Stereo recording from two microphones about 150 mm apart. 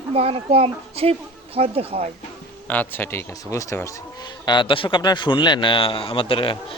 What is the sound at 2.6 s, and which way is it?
Speech, 10° left (ahead or behind).